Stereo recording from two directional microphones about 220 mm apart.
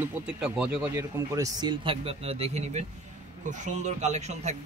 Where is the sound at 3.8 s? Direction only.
30° right (ahead or behind).